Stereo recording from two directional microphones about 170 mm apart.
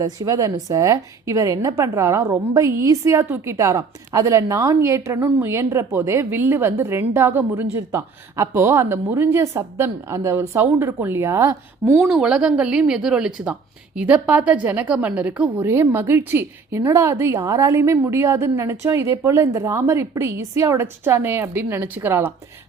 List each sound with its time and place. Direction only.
0.0 s a woman's voice: 20° right (ahead or behind)